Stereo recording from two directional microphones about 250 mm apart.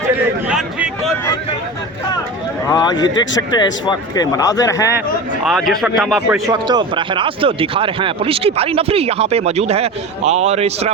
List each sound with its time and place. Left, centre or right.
0.4 s speech: centre
2.6 s speech: centre
5.5 s speech: centre
6.3 s speech: centre